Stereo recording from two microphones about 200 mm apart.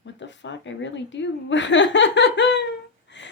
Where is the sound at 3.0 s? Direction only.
60° left (ahead or behind).